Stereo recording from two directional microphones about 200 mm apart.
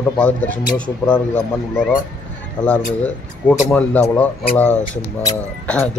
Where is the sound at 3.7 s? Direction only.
5° left (ahead or behind).